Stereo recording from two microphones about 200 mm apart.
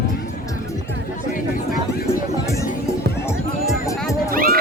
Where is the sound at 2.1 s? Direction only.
15° left (ahead or behind).